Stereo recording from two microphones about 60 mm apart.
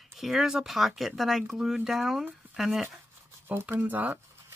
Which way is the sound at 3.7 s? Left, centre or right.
Right.